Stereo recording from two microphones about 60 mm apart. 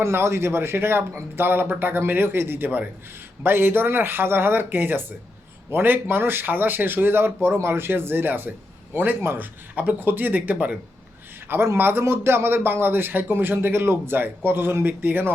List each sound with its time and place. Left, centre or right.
0.0 s a man's voice: right
11.4 s a man's voice: right